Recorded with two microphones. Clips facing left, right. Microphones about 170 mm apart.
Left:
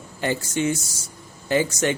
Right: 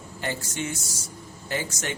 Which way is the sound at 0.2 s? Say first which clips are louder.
Left 7 dB; 90° left.